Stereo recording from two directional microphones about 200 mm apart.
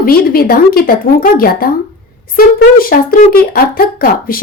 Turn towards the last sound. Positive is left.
turn(degrees=50)  # may be behind; listen again after turning